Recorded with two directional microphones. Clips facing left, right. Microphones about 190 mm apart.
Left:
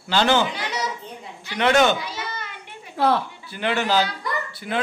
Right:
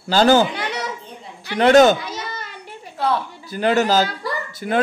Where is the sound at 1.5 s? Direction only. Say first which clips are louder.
Right 6 dB; 40° right (ahead or behind).